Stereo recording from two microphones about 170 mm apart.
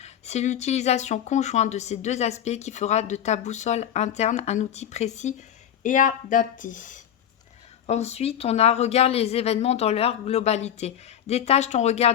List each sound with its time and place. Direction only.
0.0 s speech: 40° left (ahead or behind)